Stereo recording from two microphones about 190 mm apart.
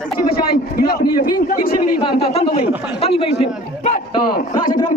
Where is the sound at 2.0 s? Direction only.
30° left (ahead or behind).